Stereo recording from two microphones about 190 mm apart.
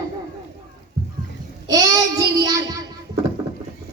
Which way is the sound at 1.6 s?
20° right (ahead or behind).